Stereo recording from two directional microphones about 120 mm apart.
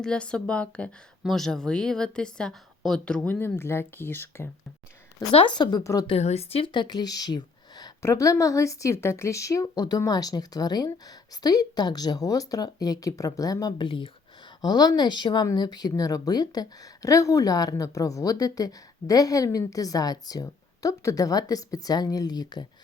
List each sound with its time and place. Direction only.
0.0 s a woman's voice: 5° left (ahead or behind)
5.3 s a woman's voice: 45° left (ahead or behind)
5.8 s a woman's voice: 30° left (ahead or behind)
6.1 s a woman's voice: 60° left (ahead or behind); by 13.8 s 30° left (ahead or behind)
13.8 s a woman's voice: 45° left (ahead or behind)